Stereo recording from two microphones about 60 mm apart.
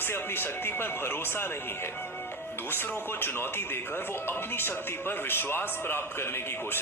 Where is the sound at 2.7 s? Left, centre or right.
Left.